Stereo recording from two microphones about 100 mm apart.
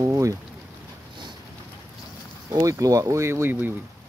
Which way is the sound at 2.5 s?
35° right (ahead or behind).